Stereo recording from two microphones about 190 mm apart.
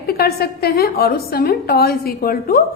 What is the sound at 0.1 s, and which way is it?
A woman's voice, 55° left (ahead or behind).